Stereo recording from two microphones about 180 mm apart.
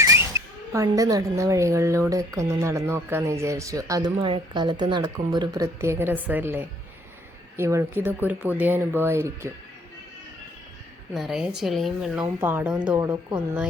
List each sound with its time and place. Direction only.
0.0 s speech: 15° right (ahead or behind)
11.1 s a woman's voice: centre (ahead or behind)
12.2 s speech: 15° right (ahead or behind)